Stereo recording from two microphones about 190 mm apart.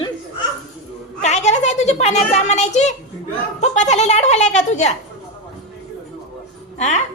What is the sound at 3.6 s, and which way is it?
A woman's voice, 35° left (ahead or behind).